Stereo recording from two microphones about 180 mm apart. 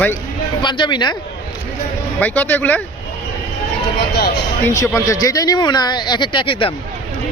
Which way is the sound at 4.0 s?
60° left (ahead or behind).